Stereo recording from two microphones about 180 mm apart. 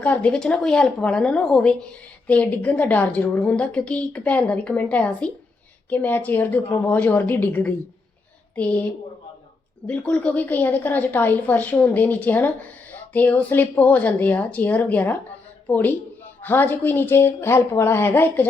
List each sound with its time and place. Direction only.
0.0 s a woman's voice: 10° left (ahead or behind)